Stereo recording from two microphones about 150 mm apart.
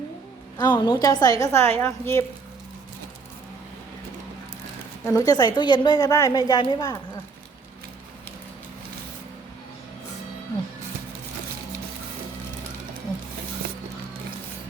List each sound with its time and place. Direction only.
0.6 s a woman's voice: 25° left (ahead or behind)
5.0 s a woman's voice: 25° left (ahead or behind)